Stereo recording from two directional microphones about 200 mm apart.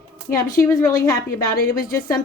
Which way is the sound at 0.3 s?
45° left (ahead or behind).